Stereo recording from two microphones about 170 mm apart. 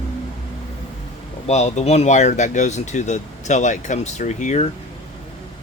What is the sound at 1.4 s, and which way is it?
Speech, 40° left (ahead or behind).